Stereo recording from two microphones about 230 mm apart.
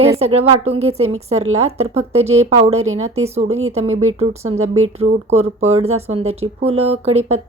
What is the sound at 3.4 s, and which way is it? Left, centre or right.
Speech, right.